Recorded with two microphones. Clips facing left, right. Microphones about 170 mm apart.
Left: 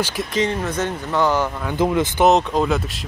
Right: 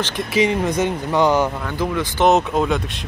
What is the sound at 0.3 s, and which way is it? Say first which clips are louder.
Speech: right 6 dB; 10° right (ahead or behind).